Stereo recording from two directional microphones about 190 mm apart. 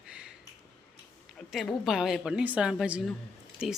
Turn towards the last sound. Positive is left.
turn(degrees=-5)  # may be behind; listen again after turning